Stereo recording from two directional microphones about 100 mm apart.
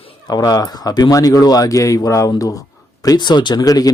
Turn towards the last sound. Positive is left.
turn(degrees=40)  # may be behind; listen again after turning